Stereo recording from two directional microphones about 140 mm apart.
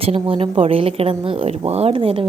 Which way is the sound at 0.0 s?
45° right (ahead or behind).